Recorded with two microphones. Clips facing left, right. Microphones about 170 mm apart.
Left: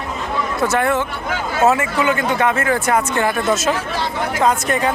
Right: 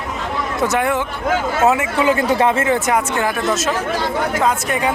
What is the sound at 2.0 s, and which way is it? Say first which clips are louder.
Speech: right 2 dB; 30° right (ahead or behind).